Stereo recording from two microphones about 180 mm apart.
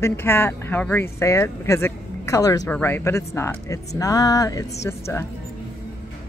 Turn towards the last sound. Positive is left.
turn(degrees=15)  # may be behind; listen again after turning